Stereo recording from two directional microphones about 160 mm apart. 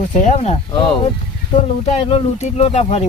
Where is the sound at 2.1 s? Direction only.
40° left (ahead or behind).